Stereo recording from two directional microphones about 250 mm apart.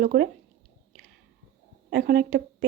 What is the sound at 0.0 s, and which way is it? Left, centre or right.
Speech, right.